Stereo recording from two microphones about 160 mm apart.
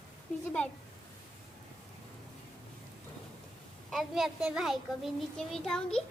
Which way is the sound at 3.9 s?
Centre (ahead or behind).